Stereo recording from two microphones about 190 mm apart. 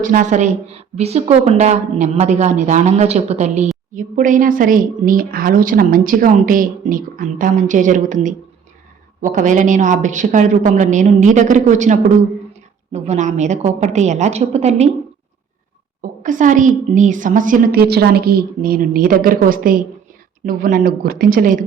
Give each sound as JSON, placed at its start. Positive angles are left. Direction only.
{"t": 0.0, "sound": "a woman's voice", "side_deg": -45}
{"t": 16.0, "sound": "speech", "side_deg": -40}